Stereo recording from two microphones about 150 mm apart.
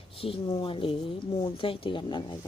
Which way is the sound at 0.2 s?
35° left (ahead or behind).